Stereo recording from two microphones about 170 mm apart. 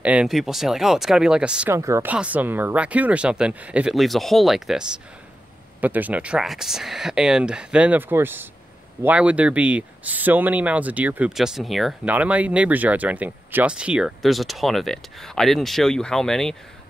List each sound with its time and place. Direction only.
0.0 s speech: 5° right (ahead or behind)
1.8 s speech: 15° right (ahead or behind); by 16.5 s 5° left (ahead or behind)